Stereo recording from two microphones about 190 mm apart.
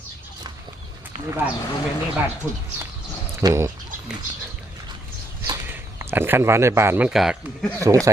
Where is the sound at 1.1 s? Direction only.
35° right (ahead or behind).